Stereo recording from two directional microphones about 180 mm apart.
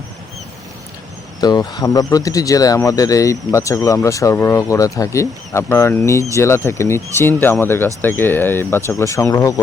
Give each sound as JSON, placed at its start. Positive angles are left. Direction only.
{"t": 1.4, "sound": "speech", "side_deg": 25}